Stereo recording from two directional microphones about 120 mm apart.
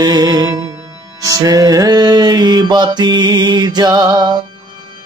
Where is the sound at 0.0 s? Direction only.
35° right (ahead or behind).